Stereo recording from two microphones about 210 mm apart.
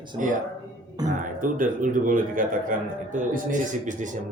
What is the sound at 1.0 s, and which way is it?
A man's voice, 40° right (ahead or behind).